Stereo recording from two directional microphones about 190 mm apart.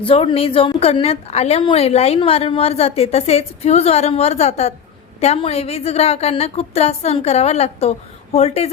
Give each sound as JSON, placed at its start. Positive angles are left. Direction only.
{"t": 0.0, "sound": "a woman's voice", "side_deg": 30}